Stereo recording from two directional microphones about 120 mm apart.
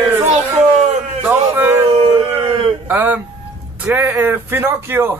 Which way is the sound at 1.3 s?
20° right (ahead or behind).